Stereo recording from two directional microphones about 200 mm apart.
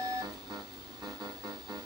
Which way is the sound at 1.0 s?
20° right (ahead or behind).